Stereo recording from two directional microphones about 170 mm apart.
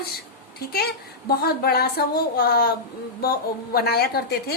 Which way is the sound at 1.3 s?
65° left (ahead or behind).